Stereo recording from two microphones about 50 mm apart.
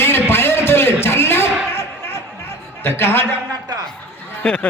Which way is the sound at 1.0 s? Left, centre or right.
Left.